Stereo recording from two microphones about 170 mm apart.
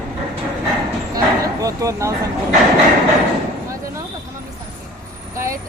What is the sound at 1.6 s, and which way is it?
Speech, 20° right (ahead or behind).